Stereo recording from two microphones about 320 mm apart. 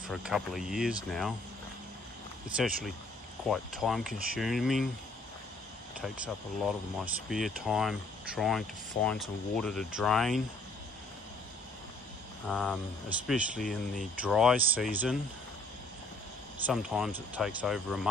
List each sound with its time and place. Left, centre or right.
0.1 s speech: centre
2.5 s speech: centre
5.9 s speech: centre
12.4 s speech: centre
16.6 s speech: centre